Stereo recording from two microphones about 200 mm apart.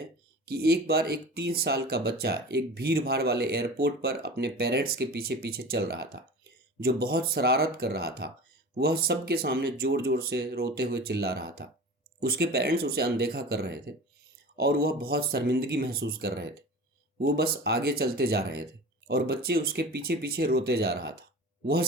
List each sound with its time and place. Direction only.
0.4 s speech: 50° right (ahead or behind)